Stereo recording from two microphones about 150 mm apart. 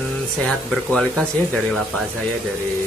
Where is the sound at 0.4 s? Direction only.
5° left (ahead or behind).